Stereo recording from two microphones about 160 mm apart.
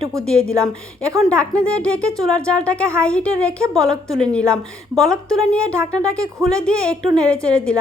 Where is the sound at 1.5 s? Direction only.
5° left (ahead or behind).